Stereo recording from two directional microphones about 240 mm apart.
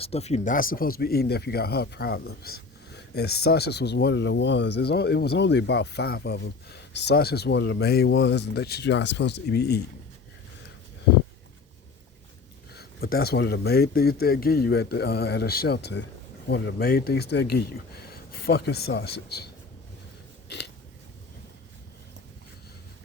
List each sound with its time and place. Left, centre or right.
0.0 s speech: left
12.7 s speech: left